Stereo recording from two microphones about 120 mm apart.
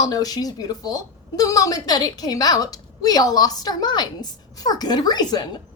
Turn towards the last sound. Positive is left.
turn(degrees=35)  # may be behind; listen again after turning